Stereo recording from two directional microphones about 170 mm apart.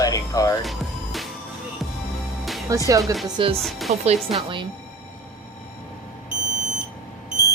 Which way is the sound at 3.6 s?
Centre (ahead or behind).